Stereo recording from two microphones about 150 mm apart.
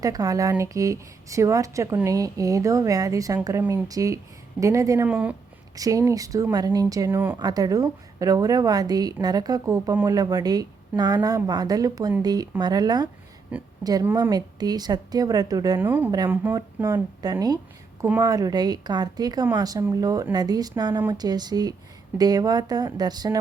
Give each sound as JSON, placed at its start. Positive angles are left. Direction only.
{"t": 0.0, "sound": "a woman's voice", "side_deg": -25}
{"t": 5.0, "sound": "speech", "side_deg": -10}
{"t": 5.7, "sound": "a woman's voice", "side_deg": -25}
{"t": 7.3, "sound": "a woman's voice", "side_deg": -25}
{"t": 13.5, "sound": "speech", "side_deg": -10}
{"t": 14.2, "sound": "a woman's voice", "side_deg": -25}
{"t": 15.8, "sound": "a woman's voice", "side_deg": -15}